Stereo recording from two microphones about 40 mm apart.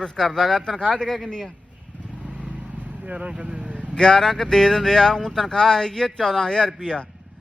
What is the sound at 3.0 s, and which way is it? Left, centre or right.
Speech, right.